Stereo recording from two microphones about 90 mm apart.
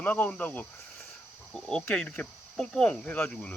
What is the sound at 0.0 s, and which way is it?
Speech, 20° left (ahead or behind).